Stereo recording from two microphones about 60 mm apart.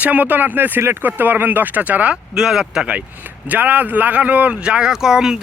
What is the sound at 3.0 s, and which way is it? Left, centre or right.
Speech, right.